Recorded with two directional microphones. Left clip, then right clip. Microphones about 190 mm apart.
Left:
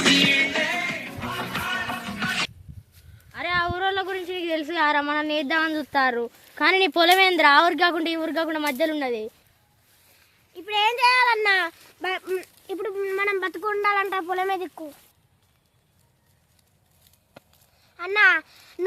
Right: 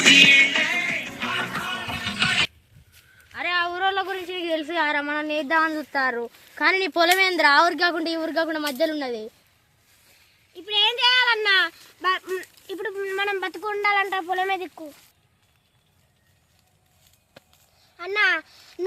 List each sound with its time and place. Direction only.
0.0 s music: 25° left (ahead or behind)
1.3 s music: centre (ahead or behind)
1.6 s music: 15° right (ahead or behind)
3.3 s a sound: 10° left (ahead or behind)
6.6 s speech: 55° left (ahead or behind)
7.9 s speech: 15° left (ahead or behind)
10.5 s a child's voice: centre (ahead or behind)
17.9 s speech: 10° left (ahead or behind)